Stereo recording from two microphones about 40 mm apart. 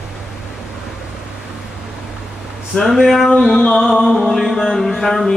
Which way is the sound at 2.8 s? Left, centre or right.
Centre.